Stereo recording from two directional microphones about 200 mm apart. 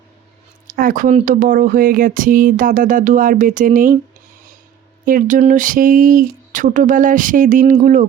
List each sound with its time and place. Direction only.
0.8 s speech: 40° right (ahead or behind)
5.0 s speech: 40° right (ahead or behind)